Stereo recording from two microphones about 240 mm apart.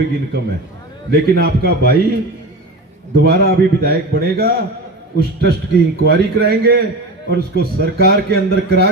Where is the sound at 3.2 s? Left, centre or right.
Right.